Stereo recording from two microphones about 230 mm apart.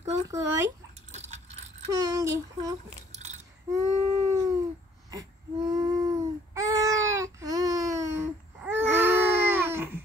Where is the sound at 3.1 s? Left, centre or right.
Right.